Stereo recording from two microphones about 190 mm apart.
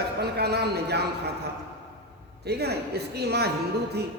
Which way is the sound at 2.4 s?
60° right (ahead or behind).